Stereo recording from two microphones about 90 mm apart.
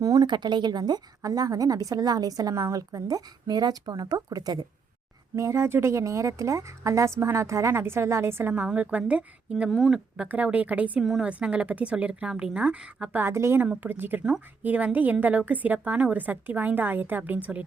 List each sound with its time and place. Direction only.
0.0 s speech: 40° right (ahead or behind)
0.3 s a woman's voice: 55° right (ahead or behind)
5.4 s a woman's voice: 30° right (ahead or behind); by 9.6 s 10° right (ahead or behind)
9.6 s speech: centre (ahead or behind)
10.2 s a woman's voice: 15° right (ahead or behind)
11.0 s speech: centre (ahead or behind)
11.3 s a woman's voice: 15° right (ahead or behind)
13.2 s a woman's voice: 30° right (ahead or behind)